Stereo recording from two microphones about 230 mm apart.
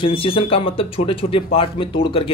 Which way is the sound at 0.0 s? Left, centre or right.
Left.